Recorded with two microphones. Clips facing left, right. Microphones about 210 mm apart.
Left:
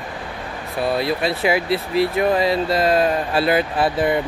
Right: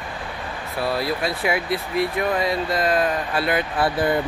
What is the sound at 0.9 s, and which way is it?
Speech, 25° left (ahead or behind).